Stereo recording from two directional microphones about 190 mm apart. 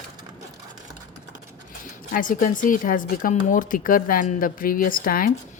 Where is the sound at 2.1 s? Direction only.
45° left (ahead or behind).